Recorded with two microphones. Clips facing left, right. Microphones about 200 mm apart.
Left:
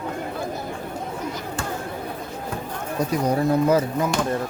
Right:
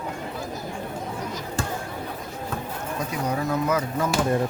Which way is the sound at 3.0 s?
35° left (ahead or behind).